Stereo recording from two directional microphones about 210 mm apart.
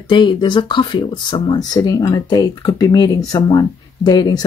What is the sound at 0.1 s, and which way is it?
Speech, 20° left (ahead or behind).